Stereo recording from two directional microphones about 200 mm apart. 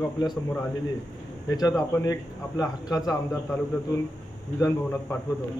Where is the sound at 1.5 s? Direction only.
20° left (ahead or behind).